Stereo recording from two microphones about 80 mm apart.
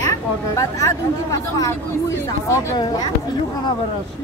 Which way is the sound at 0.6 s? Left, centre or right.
Left.